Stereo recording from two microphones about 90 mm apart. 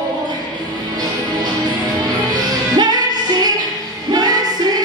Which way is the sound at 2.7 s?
50° right (ahead or behind).